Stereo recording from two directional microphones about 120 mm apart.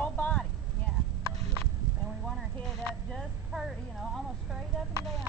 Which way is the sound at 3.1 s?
Centre (ahead or behind).